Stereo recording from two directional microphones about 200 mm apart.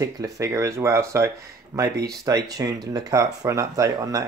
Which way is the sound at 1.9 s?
50° right (ahead or behind).